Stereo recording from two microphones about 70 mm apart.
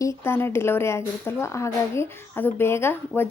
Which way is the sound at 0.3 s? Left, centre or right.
Left.